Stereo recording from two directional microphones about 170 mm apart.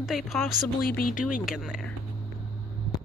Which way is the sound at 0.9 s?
60° left (ahead or behind).